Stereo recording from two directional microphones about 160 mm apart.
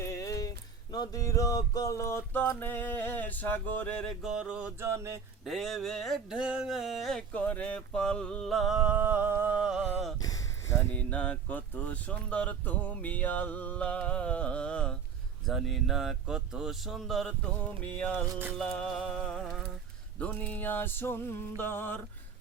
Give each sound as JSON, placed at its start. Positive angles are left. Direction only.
{"t": 0.0, "sound": "a sound", "side_deg": 20}
{"t": 4.2, "sound": "mantra", "side_deg": -5}
{"t": 4.9, "sound": "mantra", "side_deg": -15}
{"t": 5.5, "sound": "speech", "side_deg": 0}
{"t": 10.2, "sound": "a sound", "side_deg": 20}
{"t": 10.9, "sound": "speech", "side_deg": 10}